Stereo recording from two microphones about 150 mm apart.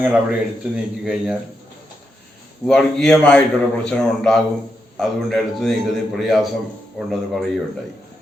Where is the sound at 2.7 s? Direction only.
5° left (ahead or behind).